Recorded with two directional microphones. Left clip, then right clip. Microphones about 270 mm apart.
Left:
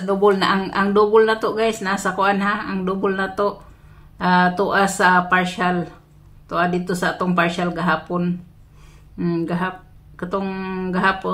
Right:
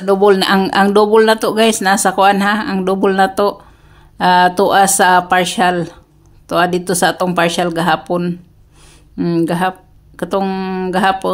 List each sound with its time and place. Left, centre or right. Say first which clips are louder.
0.0 s speech: right 6 dB; right